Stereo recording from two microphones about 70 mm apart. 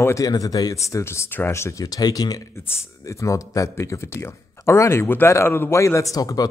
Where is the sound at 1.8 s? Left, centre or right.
Left.